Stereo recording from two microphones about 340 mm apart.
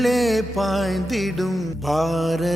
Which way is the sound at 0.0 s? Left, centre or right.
Centre.